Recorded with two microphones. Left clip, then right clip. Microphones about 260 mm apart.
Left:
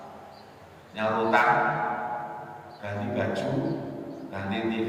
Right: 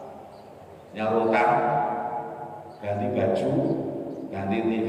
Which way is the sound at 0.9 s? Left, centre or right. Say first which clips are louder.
Right 1 dB; left.